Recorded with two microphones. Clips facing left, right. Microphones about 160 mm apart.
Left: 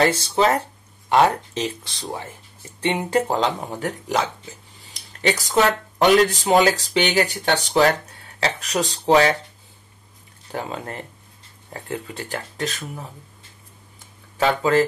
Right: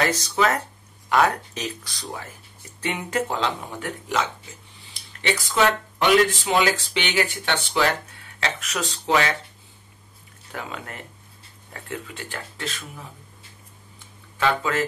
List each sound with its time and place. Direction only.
0.0 s speech: 30° left (ahead or behind)
10.5 s speech: 35° left (ahead or behind)
14.4 s speech: 40° left (ahead or behind)